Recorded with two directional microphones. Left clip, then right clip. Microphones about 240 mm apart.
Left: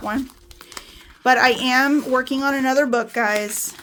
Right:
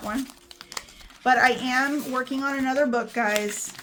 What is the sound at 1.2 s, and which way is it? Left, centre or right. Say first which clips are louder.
Speech: left 4 dB; left.